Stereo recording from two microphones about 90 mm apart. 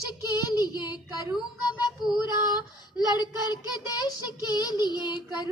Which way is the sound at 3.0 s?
50° left (ahead or behind).